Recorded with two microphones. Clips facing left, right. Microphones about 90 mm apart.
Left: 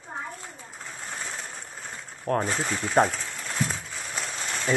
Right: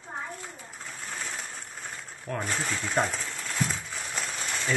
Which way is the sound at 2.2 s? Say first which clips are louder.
Left 6 dB; 45° left (ahead or behind).